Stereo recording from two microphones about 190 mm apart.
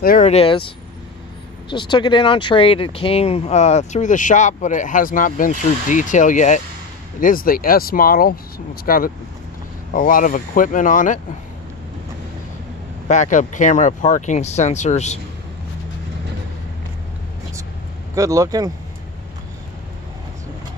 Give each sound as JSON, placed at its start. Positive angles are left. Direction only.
{"t": 0.0, "sound": "speech", "side_deg": 45}
{"t": 0.3, "sound": "speech", "side_deg": 30}
{"t": 1.7, "sound": "speech", "side_deg": 25}
{"t": 13.1, "sound": "speech", "side_deg": 40}
{"t": 18.1, "sound": "speech", "side_deg": -15}